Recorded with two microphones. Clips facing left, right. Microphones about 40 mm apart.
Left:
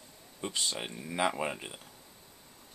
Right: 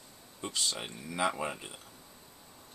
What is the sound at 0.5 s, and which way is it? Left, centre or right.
Speech, centre.